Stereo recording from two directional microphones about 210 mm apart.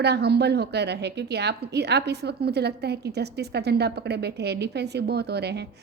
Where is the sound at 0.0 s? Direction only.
50° right (ahead or behind).